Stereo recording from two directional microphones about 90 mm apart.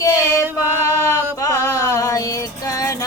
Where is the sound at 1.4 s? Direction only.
35° left (ahead or behind).